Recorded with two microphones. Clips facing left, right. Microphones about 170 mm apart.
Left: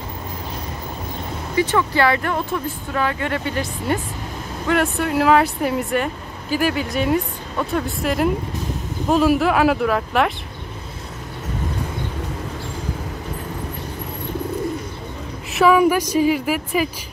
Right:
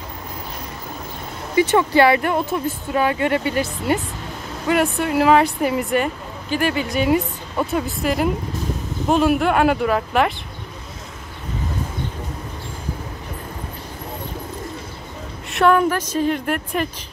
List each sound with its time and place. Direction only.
1.7 s speech: 25° right (ahead or behind)
3.9 s a woman's voice: 5° right (ahead or behind)
15.5 s a woman's voice: 5° left (ahead or behind)